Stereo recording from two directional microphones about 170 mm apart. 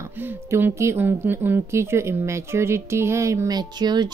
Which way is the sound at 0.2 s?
10° right (ahead or behind).